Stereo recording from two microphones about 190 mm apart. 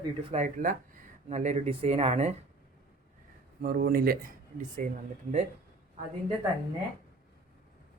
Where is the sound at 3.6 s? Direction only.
50° right (ahead or behind).